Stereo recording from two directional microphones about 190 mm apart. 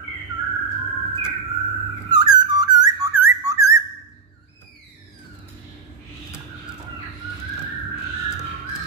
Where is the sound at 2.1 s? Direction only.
20° right (ahead or behind).